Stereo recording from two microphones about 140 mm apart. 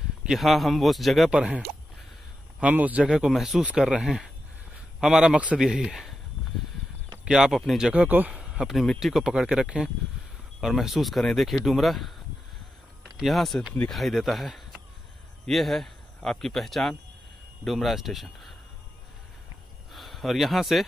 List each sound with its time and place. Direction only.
0.2 s speech: centre (ahead or behind)
2.6 s speech: 10° right (ahead or behind)
7.2 s speech: 5° right (ahead or behind)
13.2 s speech: centre (ahead or behind)
19.9 s speech: centre (ahead or behind)